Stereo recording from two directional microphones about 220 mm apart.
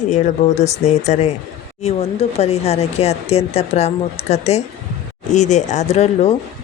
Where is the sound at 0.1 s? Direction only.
30° left (ahead or behind).